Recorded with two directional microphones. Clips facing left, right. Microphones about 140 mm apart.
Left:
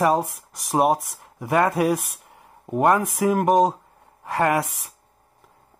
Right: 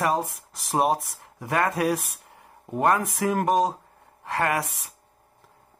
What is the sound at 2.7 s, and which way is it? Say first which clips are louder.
Speech: left 3 dB; 15° left (ahead or behind).